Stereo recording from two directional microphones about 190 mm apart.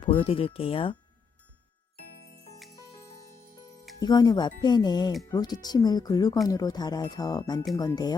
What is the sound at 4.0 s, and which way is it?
Speech, 20° left (ahead or behind).